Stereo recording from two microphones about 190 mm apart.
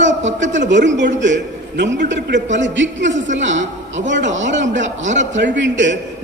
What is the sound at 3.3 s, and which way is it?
A woman's voice, 75° right (ahead or behind).